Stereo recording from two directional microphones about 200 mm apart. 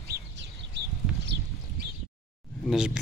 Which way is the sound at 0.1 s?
50° right (ahead or behind).